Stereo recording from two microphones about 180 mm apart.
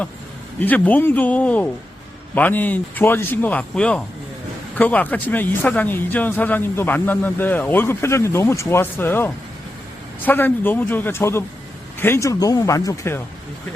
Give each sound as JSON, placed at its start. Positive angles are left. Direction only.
{"t": 0.6, "sound": "speech", "side_deg": 10}